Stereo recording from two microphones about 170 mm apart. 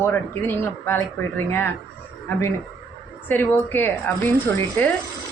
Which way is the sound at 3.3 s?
10° left (ahead or behind).